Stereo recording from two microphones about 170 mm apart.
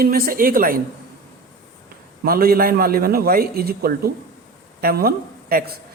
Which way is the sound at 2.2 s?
60° right (ahead or behind).